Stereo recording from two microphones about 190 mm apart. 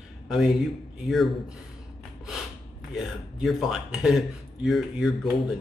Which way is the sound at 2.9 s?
Centre (ahead or behind).